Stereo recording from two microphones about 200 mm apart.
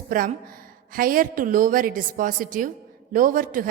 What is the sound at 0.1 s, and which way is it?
A woman's voice, 45° right (ahead or behind).